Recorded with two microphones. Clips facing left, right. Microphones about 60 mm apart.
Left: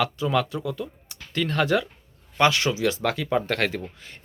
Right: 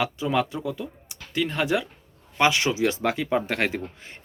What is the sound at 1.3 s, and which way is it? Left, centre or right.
Speech, centre.